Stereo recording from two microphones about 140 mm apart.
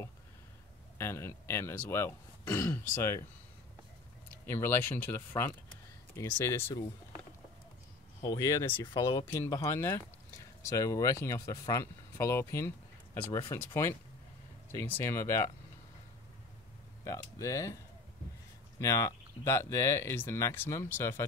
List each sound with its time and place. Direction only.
0.9 s speech: 20° left (ahead or behind)
4.6 s speech: 15° left (ahead or behind)
8.2 s speech: 25° left (ahead or behind)
8.9 s speech: 35° left (ahead or behind)
9.3 s speech: 20° left (ahead or behind)
14.8 s speech: 15° left (ahead or behind)
17.0 s speech: 25° left (ahead or behind)
18.8 s speech: 25° left (ahead or behind)